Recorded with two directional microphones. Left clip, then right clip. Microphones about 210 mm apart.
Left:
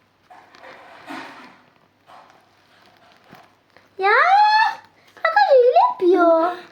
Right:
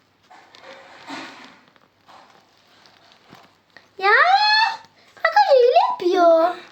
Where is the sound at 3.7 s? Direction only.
15° right (ahead or behind).